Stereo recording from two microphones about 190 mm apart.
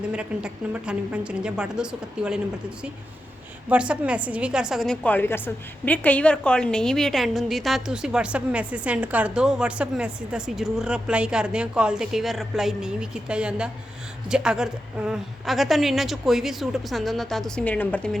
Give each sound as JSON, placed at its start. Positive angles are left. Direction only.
{"t": 0.1, "sound": "a woman's voice", "side_deg": -5}
{"t": 3.7, "sound": "a woman's voice", "side_deg": -5}